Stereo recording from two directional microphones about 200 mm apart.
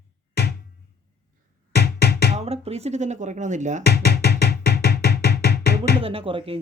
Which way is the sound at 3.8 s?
55° left (ahead or behind).